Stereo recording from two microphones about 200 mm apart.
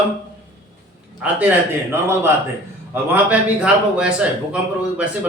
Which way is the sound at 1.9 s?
10° right (ahead or behind).